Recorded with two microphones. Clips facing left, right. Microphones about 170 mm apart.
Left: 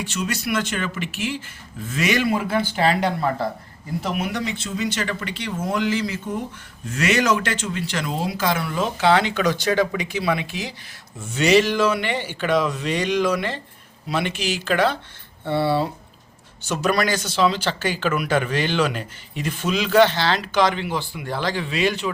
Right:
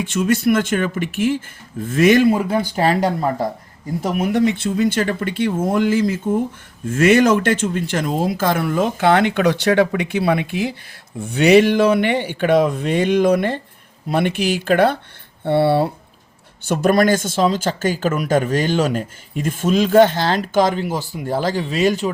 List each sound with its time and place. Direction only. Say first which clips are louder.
0.0 s speech: right 9 dB; 50° right (ahead or behind)